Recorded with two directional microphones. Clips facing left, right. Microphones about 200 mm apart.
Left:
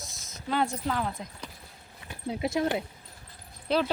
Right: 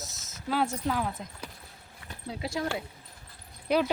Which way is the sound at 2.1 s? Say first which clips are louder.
Left 5 dB; 20° left (ahead or behind).